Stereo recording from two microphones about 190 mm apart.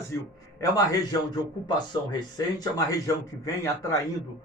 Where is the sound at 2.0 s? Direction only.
20° left (ahead or behind).